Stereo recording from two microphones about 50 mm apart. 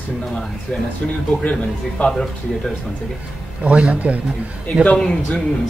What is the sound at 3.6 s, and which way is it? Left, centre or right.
Speech, right.